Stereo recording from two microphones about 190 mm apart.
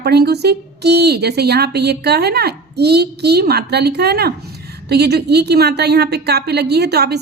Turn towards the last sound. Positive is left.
turn(degrees=-60)  # may be behind; listen again after turning